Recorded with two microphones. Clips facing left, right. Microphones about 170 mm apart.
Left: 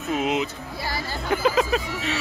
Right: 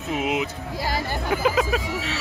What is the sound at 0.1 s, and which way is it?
Speech, 10° right (ahead or behind).